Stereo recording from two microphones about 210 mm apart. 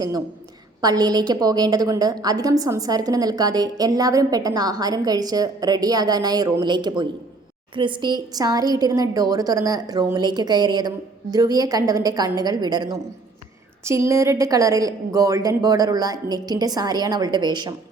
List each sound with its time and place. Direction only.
0.8 s a woman's voice: 20° right (ahead or behind)